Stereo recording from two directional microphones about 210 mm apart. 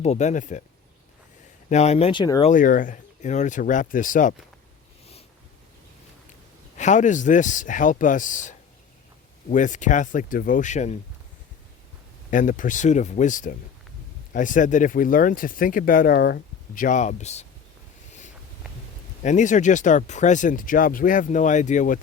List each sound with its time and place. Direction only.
0.0 s speech: 30° left (ahead or behind)
1.7 s speech: 30° left (ahead or behind)
2.5 s speech: 40° left (ahead or behind)
6.7 s speech: 35° left (ahead or behind)
12.3 s speech: 40° left (ahead or behind)
19.2 s speech: 35° left (ahead or behind)